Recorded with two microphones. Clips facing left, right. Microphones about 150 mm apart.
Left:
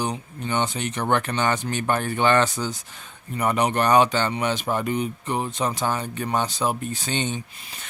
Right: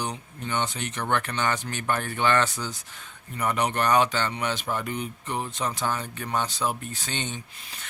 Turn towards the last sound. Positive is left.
turn(degrees=15)  # may be behind; listen again after turning